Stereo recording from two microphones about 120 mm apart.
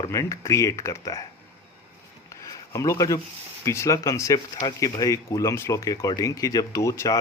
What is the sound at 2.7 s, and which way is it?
Speech, 25° left (ahead or behind).